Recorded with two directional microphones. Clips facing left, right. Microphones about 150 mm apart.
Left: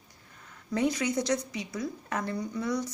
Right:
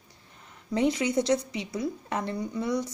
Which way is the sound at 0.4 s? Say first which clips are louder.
Right 2 dB; 20° right (ahead or behind).